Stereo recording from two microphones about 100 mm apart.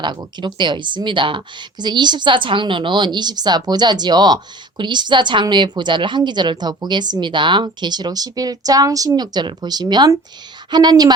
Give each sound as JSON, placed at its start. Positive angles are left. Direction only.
{"t": 0.2, "sound": "speech", "side_deg": -50}